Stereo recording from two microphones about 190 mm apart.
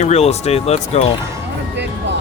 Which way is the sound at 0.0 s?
35° left (ahead or behind).